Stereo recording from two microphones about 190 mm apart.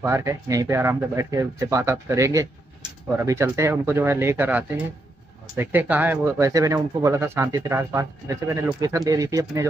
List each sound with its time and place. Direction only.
0.0 s speech: 15° right (ahead or behind)